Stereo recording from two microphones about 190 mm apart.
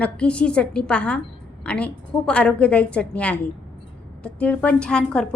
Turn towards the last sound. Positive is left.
turn(degrees=5)  # may be behind; listen again after turning